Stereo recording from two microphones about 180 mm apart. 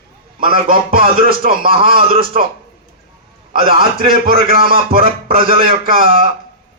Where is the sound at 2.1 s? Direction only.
30° right (ahead or behind).